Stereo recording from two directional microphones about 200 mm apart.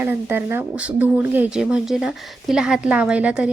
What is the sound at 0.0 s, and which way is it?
Speech, 10° right (ahead or behind).